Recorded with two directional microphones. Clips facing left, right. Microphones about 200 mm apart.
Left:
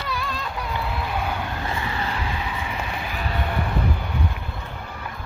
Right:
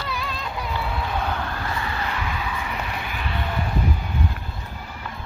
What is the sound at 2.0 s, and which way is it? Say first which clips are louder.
Vehicle: even; 30° left (ahead or behind).